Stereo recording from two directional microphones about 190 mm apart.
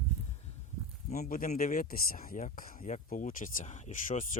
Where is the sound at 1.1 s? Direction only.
45° left (ahead or behind).